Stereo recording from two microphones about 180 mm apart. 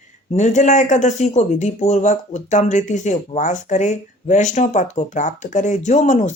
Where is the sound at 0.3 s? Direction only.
40° left (ahead or behind).